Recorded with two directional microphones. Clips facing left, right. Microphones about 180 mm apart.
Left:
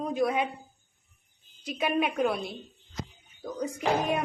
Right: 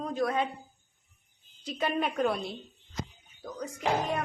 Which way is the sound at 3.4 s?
10° left (ahead or behind).